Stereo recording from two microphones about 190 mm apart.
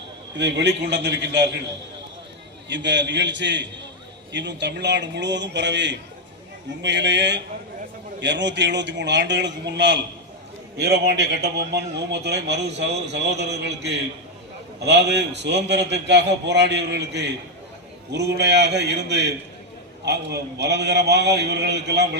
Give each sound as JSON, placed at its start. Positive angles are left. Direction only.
{"t": 0.3, "sound": "a man's voice", "side_deg": -65}
{"t": 2.6, "sound": "a man's voice", "side_deg": -70}